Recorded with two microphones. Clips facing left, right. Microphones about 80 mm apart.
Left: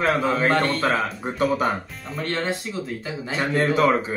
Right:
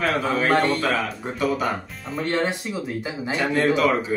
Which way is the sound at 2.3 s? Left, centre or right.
Centre.